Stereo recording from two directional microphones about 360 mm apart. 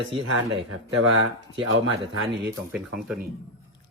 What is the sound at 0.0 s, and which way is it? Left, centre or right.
Speech, right.